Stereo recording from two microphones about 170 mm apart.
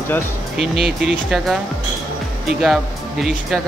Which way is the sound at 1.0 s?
Centre (ahead or behind).